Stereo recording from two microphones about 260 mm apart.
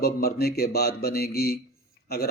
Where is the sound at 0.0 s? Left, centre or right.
Left.